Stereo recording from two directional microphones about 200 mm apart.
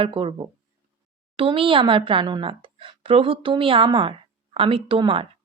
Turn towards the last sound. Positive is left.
turn(degrees=-25)  # may be behind; listen again after turning